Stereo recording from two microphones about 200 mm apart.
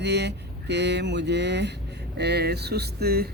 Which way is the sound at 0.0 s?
55° right (ahead or behind).